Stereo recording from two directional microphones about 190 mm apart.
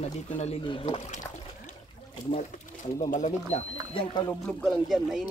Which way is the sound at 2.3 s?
40° left (ahead or behind).